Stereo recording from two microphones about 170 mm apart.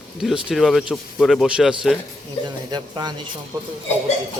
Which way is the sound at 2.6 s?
25° right (ahead or behind).